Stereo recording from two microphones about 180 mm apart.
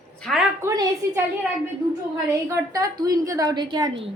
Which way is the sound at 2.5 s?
20° right (ahead or behind).